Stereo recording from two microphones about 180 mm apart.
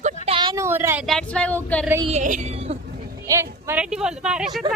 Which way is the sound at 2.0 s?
40° right (ahead or behind).